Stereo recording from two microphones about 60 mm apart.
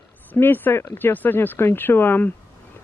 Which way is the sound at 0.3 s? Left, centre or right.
Left.